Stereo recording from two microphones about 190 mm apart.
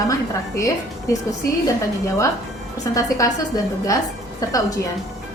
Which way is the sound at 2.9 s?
20° left (ahead or behind).